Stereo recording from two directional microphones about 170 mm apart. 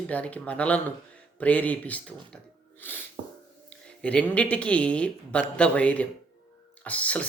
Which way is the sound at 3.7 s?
5° left (ahead or behind).